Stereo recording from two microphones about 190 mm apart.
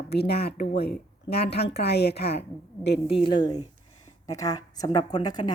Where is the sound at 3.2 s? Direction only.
25° left (ahead or behind).